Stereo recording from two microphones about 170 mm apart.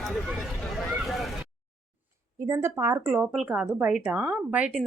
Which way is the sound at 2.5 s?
15° right (ahead or behind).